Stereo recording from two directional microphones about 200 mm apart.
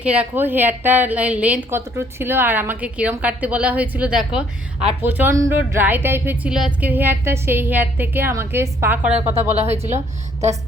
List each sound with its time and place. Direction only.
0.0 s a woman's voice: 5° right (ahead or behind)
9.1 s speech: 30° right (ahead or behind)